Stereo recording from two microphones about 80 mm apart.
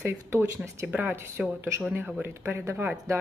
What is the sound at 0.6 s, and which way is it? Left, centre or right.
Speech, centre.